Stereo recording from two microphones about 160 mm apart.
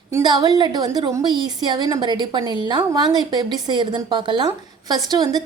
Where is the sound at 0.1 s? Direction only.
25° right (ahead or behind).